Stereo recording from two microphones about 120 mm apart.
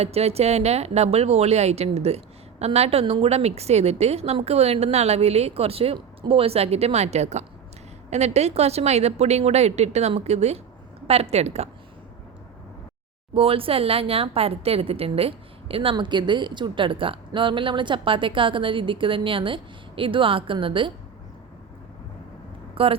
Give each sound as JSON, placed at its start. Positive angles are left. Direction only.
{"t": 0.0, "sound": "a woman's voice", "side_deg": -60}
{"t": 13.3, "sound": "speech", "side_deg": -50}
{"t": 22.7, "sound": "speech", "side_deg": -50}